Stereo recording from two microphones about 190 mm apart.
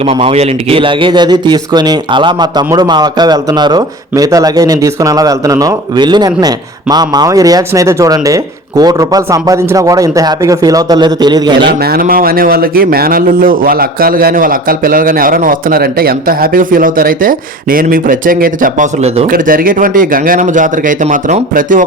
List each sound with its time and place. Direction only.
0.0 s a man's voice: 30° right (ahead or behind)
11.6 s speech: 55° right (ahead or behind); by 19.3 s 35° right (ahead or behind)
19.3 s speech: 50° right (ahead or behind)